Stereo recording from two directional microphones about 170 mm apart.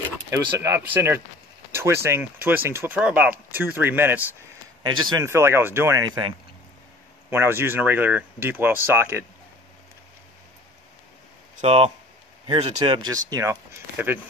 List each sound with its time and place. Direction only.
0.3 s speech: 15° right (ahead or behind)
1.7 s a sound: 15° right (ahead or behind)
2.4 s speech: 10° right (ahead or behind)
7.2 s speech: 15° right (ahead or behind)
11.6 s speech: 35° right (ahead or behind)
13.3 s speech: 20° right (ahead or behind)